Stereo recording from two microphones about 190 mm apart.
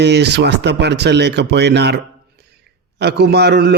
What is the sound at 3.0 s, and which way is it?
Speech, 60° right (ahead or behind).